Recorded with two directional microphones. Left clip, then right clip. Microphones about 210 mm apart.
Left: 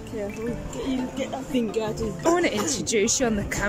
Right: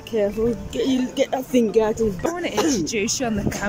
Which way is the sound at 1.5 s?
30° right (ahead or behind).